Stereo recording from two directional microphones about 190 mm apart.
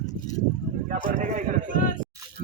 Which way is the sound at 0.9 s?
40° right (ahead or behind).